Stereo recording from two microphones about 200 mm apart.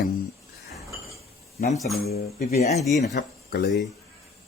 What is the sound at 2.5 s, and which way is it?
Speech, 35° left (ahead or behind).